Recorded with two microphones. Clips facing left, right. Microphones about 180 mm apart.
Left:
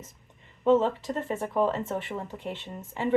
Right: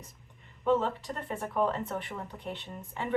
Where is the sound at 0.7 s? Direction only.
25° left (ahead or behind).